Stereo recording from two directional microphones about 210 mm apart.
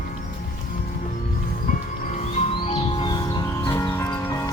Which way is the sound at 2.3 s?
25° left (ahead or behind).